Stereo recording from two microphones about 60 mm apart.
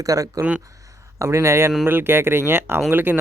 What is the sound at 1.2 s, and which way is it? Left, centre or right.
Speech, right.